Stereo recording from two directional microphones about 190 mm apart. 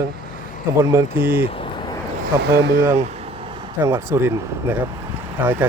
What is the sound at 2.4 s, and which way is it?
Speech, 60° right (ahead or behind).